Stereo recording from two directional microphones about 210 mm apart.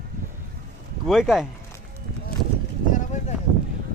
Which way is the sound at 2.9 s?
35° left (ahead or behind).